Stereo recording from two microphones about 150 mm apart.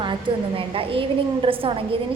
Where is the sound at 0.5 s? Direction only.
40° right (ahead or behind).